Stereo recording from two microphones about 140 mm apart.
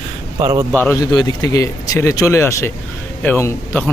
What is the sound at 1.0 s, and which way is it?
A man's voice, 25° left (ahead or behind).